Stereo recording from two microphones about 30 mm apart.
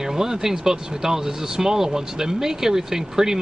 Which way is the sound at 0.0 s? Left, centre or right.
Centre.